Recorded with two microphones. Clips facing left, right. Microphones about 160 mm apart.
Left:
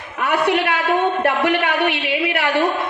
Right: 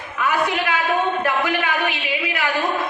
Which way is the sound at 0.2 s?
65° left (ahead or behind).